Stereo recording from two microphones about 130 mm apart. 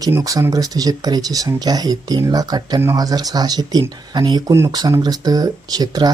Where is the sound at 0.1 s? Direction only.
25° right (ahead or behind).